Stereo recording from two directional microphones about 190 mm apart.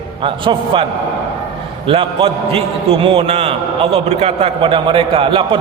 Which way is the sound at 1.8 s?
30° right (ahead or behind).